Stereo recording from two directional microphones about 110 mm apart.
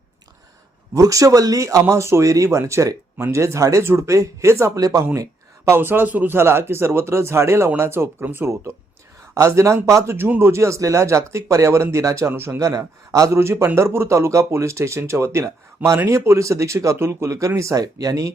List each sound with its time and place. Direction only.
0.9 s speech: 30° right (ahead or behind)